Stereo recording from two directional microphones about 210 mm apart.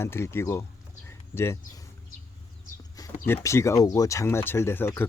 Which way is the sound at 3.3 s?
10° left (ahead or behind).